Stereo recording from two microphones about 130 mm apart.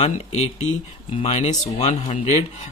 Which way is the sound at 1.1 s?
55° left (ahead or behind).